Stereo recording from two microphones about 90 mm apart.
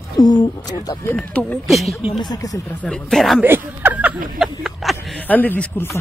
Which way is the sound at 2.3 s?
40° left (ahead or behind).